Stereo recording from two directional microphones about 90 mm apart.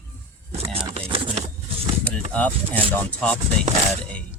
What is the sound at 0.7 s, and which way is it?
Speech, 90° right.